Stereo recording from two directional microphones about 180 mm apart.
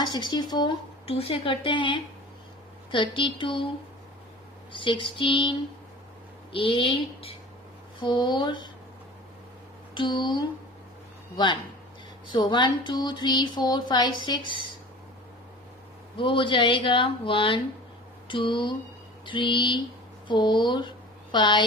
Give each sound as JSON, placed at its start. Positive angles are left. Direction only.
{"t": 0.0, "sound": "speech", "side_deg": 25}
{"t": 4.7, "sound": "speech", "side_deg": 25}
{"t": 9.9, "sound": "speech", "side_deg": 25}
{"t": 12.3, "sound": "speech", "side_deg": 25}
{"t": 16.1, "sound": "speech", "side_deg": 30}